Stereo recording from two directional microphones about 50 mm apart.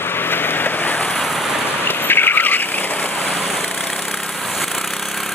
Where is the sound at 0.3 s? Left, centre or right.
Left.